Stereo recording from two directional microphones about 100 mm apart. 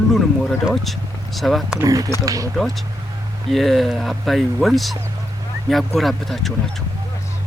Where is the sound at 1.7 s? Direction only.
35° right (ahead or behind).